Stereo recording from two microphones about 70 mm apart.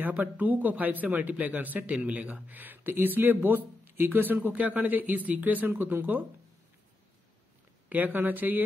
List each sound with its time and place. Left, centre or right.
0.0 s speech: right
7.9 s speech: right